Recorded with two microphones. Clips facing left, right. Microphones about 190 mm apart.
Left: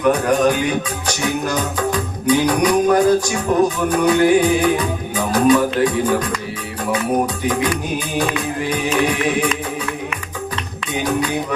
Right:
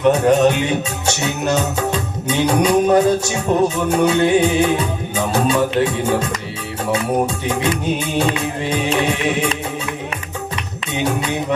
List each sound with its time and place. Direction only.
0.0 s music: 25° right (ahead or behind)
7.4 s music: 25° right (ahead or behind)